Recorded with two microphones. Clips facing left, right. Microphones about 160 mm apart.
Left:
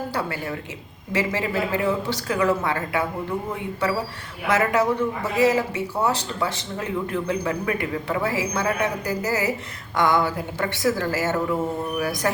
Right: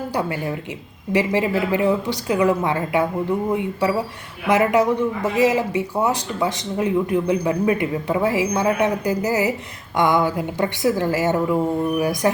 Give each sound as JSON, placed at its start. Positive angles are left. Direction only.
{"t": 0.1, "sound": "speech", "side_deg": -15}